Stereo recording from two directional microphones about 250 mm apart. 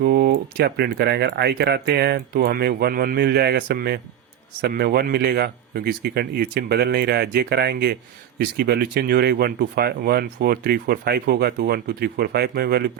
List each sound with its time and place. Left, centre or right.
0.0 s speech: right